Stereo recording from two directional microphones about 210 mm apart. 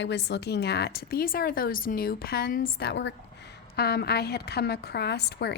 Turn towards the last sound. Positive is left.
turn(degrees=50)  # may be behind; listen again after turning